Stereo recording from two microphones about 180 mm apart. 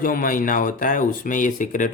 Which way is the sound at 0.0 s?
50° left (ahead or behind).